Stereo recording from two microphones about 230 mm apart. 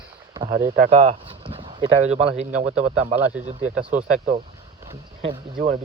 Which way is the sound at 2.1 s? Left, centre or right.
Right.